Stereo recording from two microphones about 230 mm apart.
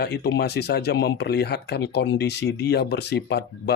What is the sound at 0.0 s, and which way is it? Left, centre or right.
Speech, left.